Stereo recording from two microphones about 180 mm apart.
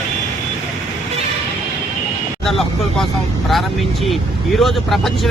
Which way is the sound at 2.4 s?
Centre (ahead or behind).